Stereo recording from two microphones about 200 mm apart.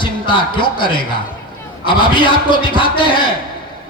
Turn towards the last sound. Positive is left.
turn(degrees=25)  # may be behind; listen again after turning